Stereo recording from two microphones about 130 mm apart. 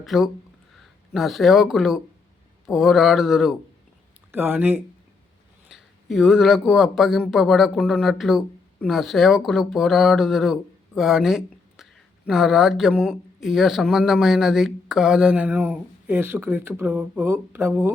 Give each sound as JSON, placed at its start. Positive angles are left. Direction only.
{"t": 0.0, "sound": "speech", "side_deg": 0}
{"t": 4.3, "sound": "speech", "side_deg": -15}
{"t": 5.6, "sound": "speech", "side_deg": -5}